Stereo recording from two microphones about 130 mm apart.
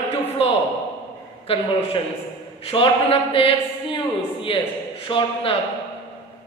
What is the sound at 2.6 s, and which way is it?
Speech, 40° left (ahead or behind).